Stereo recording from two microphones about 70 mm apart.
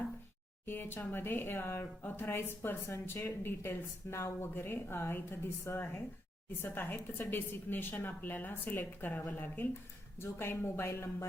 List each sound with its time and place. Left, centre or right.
0.6 s speech: left